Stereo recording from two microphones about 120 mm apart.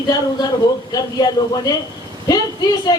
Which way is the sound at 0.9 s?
35° left (ahead or behind).